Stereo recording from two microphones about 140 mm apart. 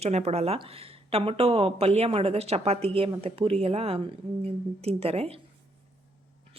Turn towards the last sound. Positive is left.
turn(degrees=-45)  # may be behind; listen again after turning